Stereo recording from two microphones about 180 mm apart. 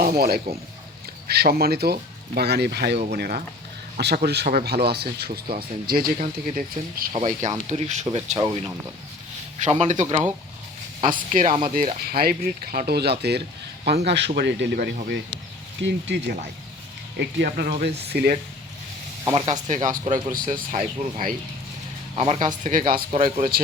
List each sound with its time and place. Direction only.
0.0 s speech: 55° right (ahead or behind); by 8.4 s 30° right (ahead or behind)
9.6 s speech: 40° right (ahead or behind); by 18.3 s 60° right (ahead or behind)
19.3 s speech: 40° right (ahead or behind)
22.1 s speech: 35° right (ahead or behind)
22.6 s speech: 50° right (ahead or behind)